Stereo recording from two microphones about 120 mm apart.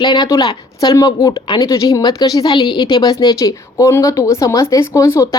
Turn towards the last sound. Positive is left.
turn(degrees=25)  # may be behind; listen again after turning